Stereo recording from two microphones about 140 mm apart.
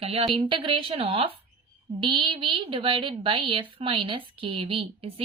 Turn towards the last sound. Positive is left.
turn(degrees=-40)  # may be behind; listen again after turning